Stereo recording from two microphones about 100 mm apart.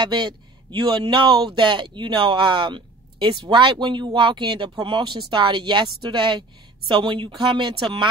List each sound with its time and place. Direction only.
0.0 s speech: 50° right (ahead or behind)